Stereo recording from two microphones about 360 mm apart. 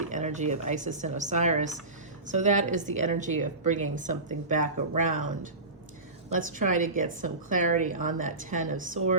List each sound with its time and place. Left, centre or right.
0.1 s a woman's voice: centre
6.6 s a woman's voice: right